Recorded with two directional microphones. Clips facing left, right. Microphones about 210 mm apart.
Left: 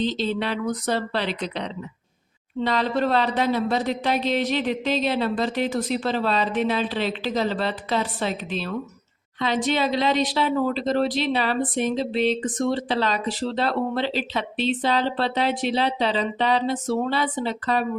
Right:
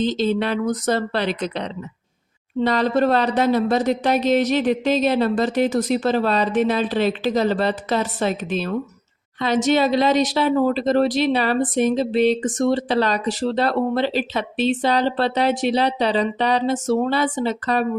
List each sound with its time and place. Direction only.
0.0 s speech: 45° right (ahead or behind)